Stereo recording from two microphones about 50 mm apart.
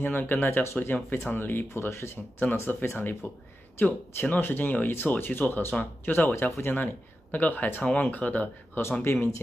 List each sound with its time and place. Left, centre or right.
0.0 s speech: left
2.5 s speech: left
3.0 s speech: left
9.1 s speech: left